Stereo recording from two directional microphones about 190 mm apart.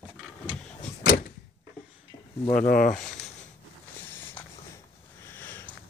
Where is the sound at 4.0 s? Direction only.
10° left (ahead or behind).